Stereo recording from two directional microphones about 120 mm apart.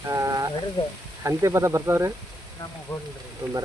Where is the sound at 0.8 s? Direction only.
50° left (ahead or behind).